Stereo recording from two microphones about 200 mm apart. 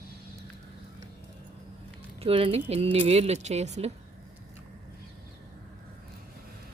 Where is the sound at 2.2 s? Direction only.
30° right (ahead or behind).